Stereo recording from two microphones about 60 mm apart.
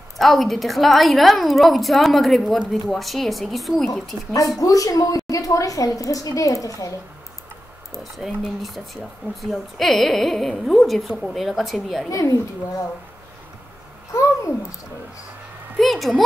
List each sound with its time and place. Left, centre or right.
0.2 s a woman's voice: centre
4.3 s a woman's voice: left
7.9 s a woman's voice: centre
12.1 s a woman's voice: left
14.1 s babbling: left
15.8 s a woman's voice: centre